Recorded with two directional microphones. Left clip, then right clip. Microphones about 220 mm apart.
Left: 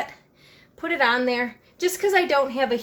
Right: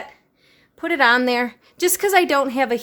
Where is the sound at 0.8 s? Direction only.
35° right (ahead or behind).